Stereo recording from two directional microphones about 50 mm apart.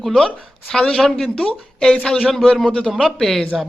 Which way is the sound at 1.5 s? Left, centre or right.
Centre.